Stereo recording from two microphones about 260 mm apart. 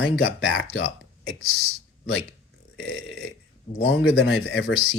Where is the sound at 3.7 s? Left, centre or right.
Left.